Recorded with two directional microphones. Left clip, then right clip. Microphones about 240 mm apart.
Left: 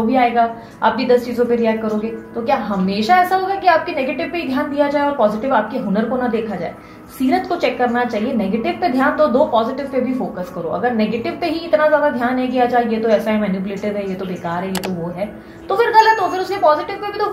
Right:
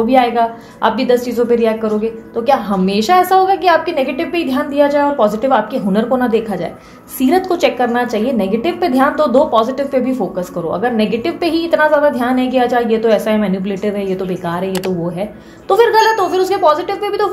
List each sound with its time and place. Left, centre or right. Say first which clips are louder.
0.1 s a woman's voice: right 1 dB; right
10.8 s a woman's voice: right 2 dB; right
15.7 s a woman's voice: right 2 dB; right